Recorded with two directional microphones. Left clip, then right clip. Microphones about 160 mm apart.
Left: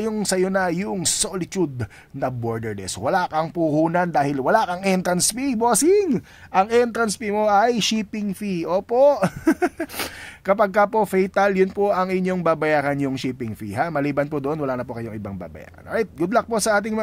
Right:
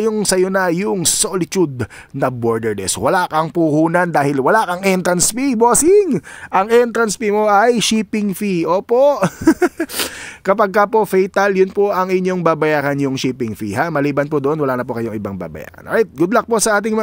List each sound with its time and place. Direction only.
0.0 s speech: 30° right (ahead or behind); by 6.6 s 55° right (ahead or behind)
6.6 s speech: 40° right (ahead or behind)
7.5 s speech: 45° right (ahead or behind)